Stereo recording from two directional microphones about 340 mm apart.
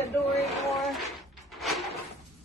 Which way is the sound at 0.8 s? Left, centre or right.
Centre.